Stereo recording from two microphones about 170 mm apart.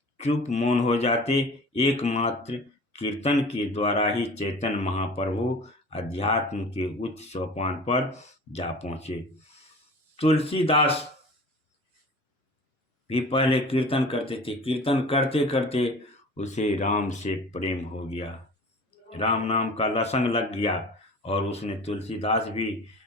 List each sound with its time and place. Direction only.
0.2 s speech: 40° left (ahead or behind)
10.2 s speech: 35° left (ahead or behind)
13.1 s speech: 35° left (ahead or behind)